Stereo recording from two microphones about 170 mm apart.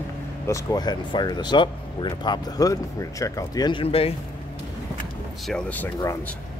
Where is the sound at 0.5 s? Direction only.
20° left (ahead or behind).